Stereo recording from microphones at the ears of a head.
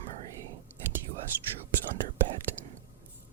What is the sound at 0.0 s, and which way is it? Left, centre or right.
Whispering, right.